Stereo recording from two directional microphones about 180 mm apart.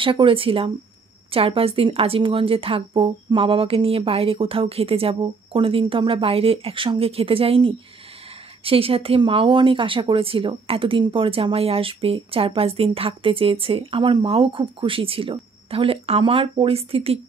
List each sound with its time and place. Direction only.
0.0 s speech: 30° right (ahead or behind)